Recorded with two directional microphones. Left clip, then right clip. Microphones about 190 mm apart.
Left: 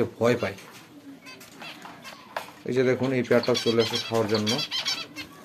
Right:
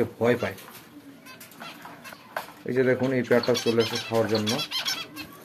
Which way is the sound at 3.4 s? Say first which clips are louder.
Even; 10° right (ahead or behind).